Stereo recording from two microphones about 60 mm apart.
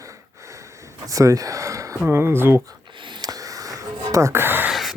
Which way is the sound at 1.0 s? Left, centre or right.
Right.